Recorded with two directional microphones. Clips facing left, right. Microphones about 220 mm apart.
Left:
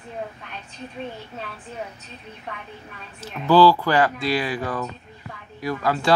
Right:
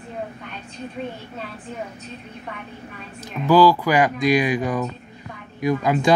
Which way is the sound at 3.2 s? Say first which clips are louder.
Right 1 dB; 10° right (ahead or behind).